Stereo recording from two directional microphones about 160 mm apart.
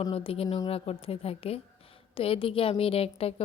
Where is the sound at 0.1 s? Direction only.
35° left (ahead or behind).